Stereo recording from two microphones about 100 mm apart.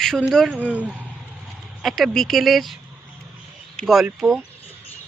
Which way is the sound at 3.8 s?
Centre (ahead or behind).